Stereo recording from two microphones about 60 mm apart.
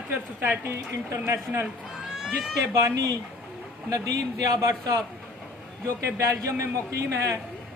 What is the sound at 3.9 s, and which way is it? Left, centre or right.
Speech, right.